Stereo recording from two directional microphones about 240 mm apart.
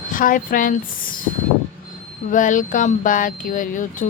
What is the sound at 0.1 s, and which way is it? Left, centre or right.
Speech, left.